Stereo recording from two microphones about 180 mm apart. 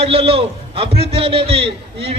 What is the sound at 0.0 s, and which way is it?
A man's voice, 30° right (ahead or behind).